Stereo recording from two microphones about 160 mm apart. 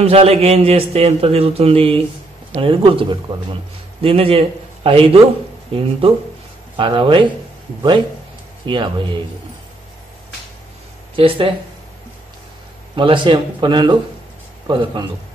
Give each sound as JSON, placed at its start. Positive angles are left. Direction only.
{"t": 0.0, "sound": "a man's voice", "side_deg": -40}
{"t": 8.6, "sound": "speech", "side_deg": -30}
{"t": 11.1, "sound": "a man's voice", "side_deg": -35}
{"t": 12.9, "sound": "a man's voice", "side_deg": -30}